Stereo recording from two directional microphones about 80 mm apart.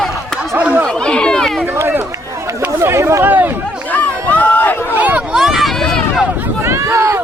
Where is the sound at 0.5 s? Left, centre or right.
Right.